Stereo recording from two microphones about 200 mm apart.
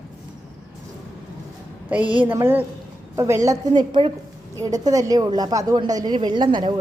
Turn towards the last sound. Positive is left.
turn(degrees=-25)  # may be behind; listen again after turning